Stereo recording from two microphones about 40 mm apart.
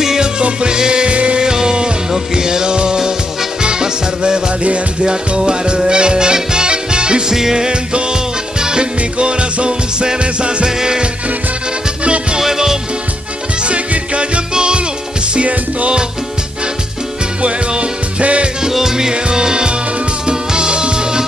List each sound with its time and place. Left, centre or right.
0.0 s music: centre
0.4 s music: right
1.4 s music: centre
12.0 s music: right
12.4 s music: centre
13.7 s music: right
15.3 s music: right
17.4 s music: right
18.6 s music: centre